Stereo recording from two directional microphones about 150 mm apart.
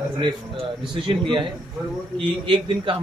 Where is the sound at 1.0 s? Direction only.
35° right (ahead or behind).